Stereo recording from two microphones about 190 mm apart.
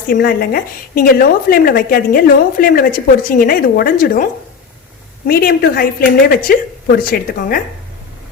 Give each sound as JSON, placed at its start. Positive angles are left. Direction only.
{"t": 0.1, "sound": "a woman's voice", "side_deg": 50}